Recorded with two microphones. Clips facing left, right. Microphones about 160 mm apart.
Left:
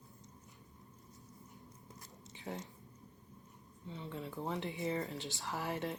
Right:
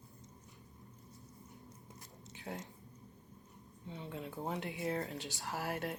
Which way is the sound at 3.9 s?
15° right (ahead or behind).